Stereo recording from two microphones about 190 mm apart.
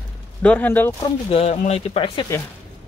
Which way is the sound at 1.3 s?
30° left (ahead or behind).